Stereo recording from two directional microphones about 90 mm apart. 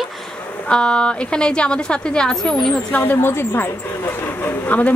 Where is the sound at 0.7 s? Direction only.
10° left (ahead or behind).